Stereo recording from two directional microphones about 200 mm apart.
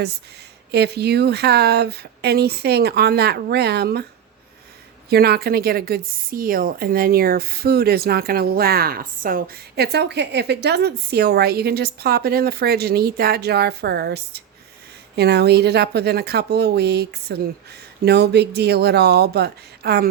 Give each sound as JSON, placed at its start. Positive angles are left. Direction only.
{"t": 0.7, "sound": "a woman's voice", "side_deg": -55}
{"t": 5.0, "sound": "a woman's voice", "side_deg": -50}